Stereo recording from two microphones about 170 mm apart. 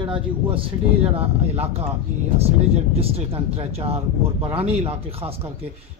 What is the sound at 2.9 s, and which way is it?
A man's voice, 35° right (ahead or behind).